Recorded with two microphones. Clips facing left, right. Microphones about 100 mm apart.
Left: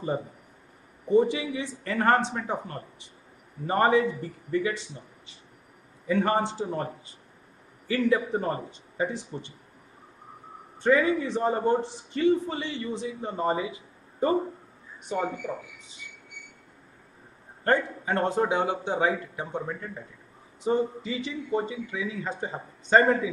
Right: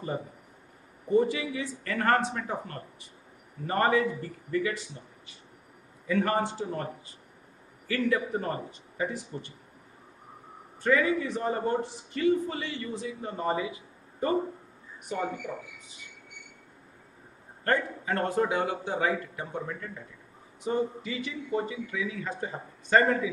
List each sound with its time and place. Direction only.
1.0 s a man's voice: 20° left (ahead or behind)
6.0 s a man's voice: 25° left (ahead or behind)
10.8 s a man's voice: 25° left (ahead or behind)
17.6 s a man's voice: 25° left (ahead or behind)